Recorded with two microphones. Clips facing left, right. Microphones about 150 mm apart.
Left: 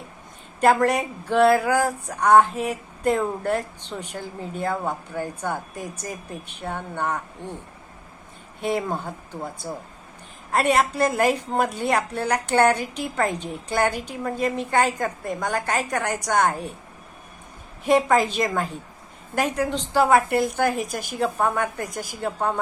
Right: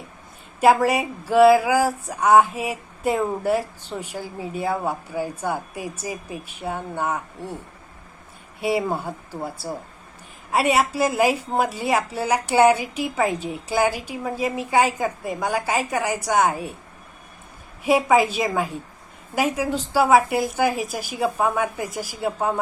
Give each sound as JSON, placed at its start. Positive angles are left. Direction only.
{"t": 0.6, "sound": "a woman's voice", "side_deg": -5}
{"t": 8.6, "sound": "a woman's voice", "side_deg": -10}
{"t": 17.8, "sound": "a woman's voice", "side_deg": -5}